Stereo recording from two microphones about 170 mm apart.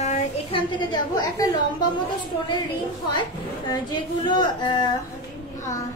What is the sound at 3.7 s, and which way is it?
A woman's voice, 25° left (ahead or behind).